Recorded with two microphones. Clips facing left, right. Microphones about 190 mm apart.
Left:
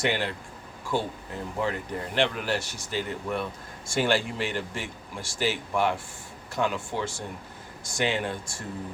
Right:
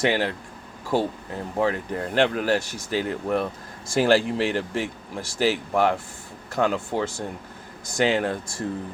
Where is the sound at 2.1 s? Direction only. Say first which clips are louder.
Right 6 dB; 45° right (ahead or behind).